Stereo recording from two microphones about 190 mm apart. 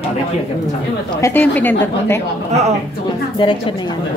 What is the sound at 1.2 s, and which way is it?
Speech, 10° left (ahead or behind).